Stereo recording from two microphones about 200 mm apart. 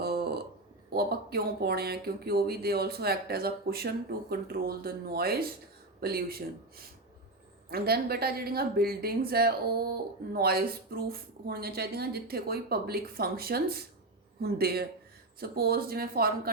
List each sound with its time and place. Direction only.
0.0 s a sound: 50° right (ahead or behind)
0.9 s speech: 50° right (ahead or behind)
7.7 s speech: 50° right (ahead or behind)